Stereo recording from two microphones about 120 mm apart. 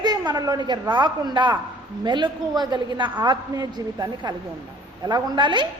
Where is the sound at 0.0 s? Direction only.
35° right (ahead or behind).